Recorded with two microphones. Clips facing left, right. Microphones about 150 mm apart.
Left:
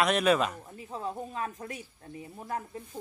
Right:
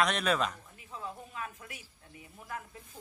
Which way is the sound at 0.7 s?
35° left (ahead or behind).